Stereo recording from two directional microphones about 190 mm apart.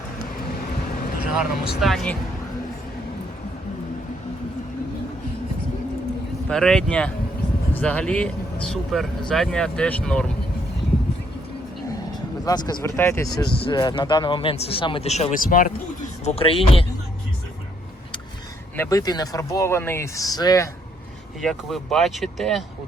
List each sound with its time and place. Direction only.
1.8 s speech: centre (ahead or behind)
6.5 s speech: 5° left (ahead or behind)
12.5 s speech: 20° left (ahead or behind); by 15.7 s 45° left (ahead or behind)
16.2 s speech: 30° left (ahead or behind)
18.8 s speech: 15° left (ahead or behind)
21.4 s speech: centre (ahead or behind)